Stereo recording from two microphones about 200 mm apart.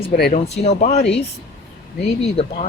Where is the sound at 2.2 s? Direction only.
30° left (ahead or behind).